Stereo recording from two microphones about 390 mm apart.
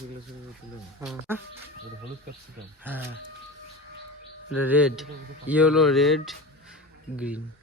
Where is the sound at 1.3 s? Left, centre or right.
Centre.